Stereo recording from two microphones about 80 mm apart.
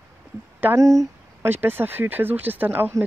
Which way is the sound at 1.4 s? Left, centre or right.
Right.